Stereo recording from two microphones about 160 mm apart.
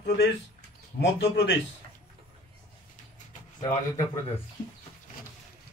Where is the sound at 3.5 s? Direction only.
20° left (ahead or behind).